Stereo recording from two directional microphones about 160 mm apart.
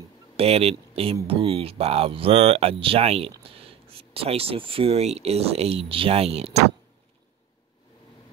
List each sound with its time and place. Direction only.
0.4 s speech: 40° right (ahead or behind)